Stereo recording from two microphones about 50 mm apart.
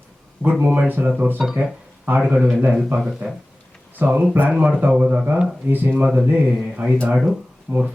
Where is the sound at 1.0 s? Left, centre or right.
Right.